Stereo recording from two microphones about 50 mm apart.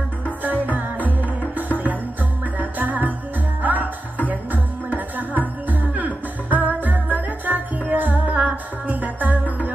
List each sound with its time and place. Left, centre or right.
0.4 s music: right
0.9 s music: left
2.6 s music: right